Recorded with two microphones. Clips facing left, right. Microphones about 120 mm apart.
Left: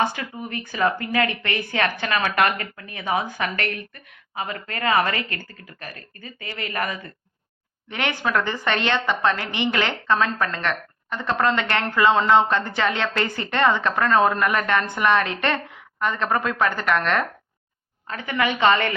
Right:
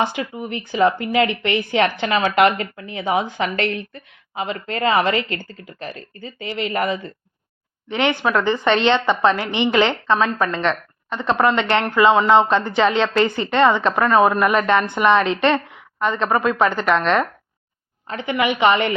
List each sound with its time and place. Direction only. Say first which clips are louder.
0.0 s a woman's voice: right 2 dB; 20° right (ahead or behind)